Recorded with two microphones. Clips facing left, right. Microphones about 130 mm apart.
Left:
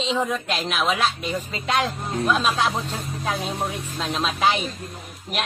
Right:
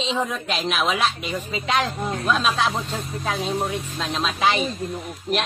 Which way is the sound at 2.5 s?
10° left (ahead or behind).